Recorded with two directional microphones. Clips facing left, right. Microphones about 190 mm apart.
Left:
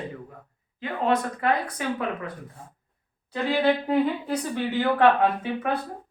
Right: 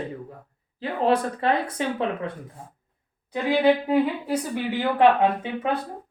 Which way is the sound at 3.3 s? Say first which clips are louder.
Right 3 dB; 15° right (ahead or behind).